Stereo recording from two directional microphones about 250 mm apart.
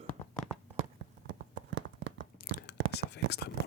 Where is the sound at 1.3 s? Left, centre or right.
Right.